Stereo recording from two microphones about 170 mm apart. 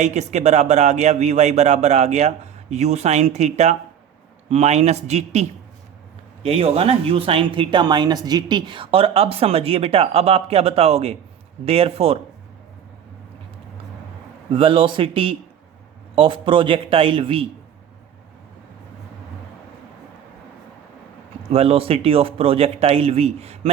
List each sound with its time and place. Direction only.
0.0 s speech: 45° right (ahead or behind)
14.5 s speech: 30° right (ahead or behind)
21.5 s speech: 35° right (ahead or behind)